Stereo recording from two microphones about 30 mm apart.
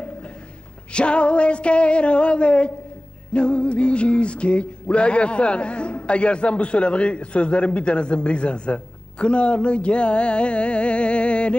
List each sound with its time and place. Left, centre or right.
0.9 s music: left